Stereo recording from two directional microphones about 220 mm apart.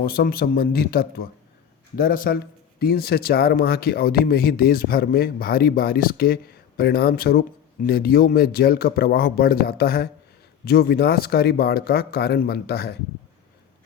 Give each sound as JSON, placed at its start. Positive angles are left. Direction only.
{"t": 0.0, "sound": "speech", "side_deg": 40}